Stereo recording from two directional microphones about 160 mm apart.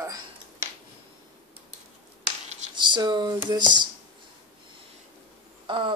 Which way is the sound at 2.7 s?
30° right (ahead or behind).